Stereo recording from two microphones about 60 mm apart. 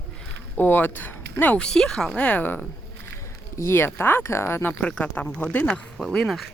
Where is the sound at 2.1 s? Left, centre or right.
Left.